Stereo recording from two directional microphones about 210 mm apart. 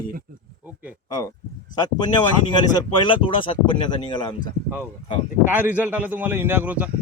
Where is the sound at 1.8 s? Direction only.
20° left (ahead or behind).